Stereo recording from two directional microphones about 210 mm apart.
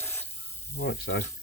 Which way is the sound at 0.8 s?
50° left (ahead or behind).